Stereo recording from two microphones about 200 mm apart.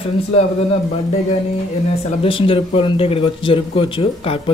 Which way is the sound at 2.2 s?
25° left (ahead or behind).